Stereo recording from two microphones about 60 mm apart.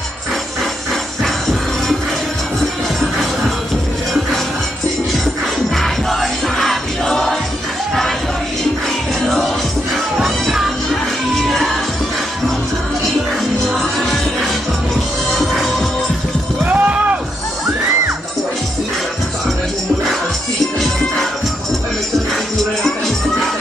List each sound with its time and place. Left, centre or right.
5.8 s music: centre
9.2 s music: centre
13.4 s music: centre
16.6 s a sound: right